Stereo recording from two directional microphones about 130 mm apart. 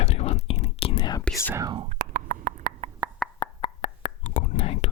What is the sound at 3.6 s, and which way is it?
Whispering, 65° left (ahead or behind).